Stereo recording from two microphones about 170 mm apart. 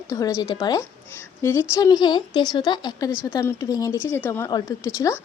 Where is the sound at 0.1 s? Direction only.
20° left (ahead or behind).